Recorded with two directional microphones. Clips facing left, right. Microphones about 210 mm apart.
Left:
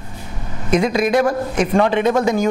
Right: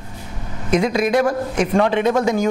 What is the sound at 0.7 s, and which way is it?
A man's voice, 20° left (ahead or behind).